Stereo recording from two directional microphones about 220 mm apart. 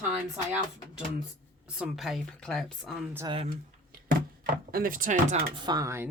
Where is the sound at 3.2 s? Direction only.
25° right (ahead or behind).